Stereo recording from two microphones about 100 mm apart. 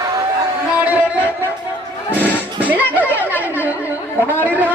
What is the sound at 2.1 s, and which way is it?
Music, 20° left (ahead or behind).